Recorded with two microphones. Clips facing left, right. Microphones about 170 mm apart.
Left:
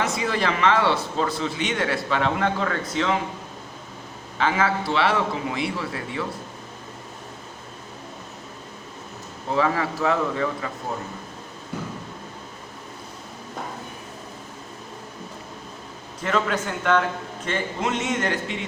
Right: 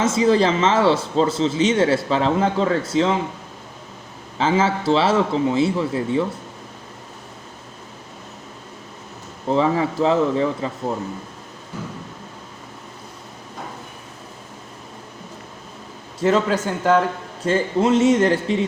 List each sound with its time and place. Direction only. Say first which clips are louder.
0.0 s a man's voice: right 8 dB; 25° right (ahead or behind)
4.4 s a man's voice: right 4 dB; 25° right (ahead or behind)
9.5 s a man's voice: right 4 dB; 25° right (ahead or behind)
16.2 s a man's voice: right 6 dB; 30° right (ahead or behind)